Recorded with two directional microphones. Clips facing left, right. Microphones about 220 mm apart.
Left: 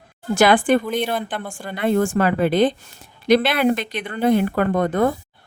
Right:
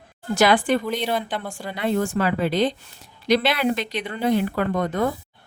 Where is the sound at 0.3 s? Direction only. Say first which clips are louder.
Left 3 dB; 50° left (ahead or behind).